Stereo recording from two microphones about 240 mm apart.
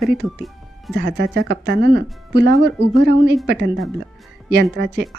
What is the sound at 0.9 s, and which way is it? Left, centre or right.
Speech, right.